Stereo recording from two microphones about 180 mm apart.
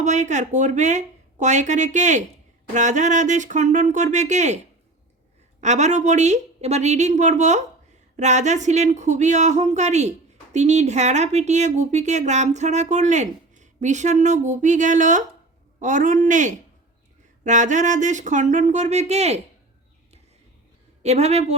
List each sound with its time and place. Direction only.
0.0 s speech: 40° right (ahead or behind)
21.0 s speech: 35° right (ahead or behind)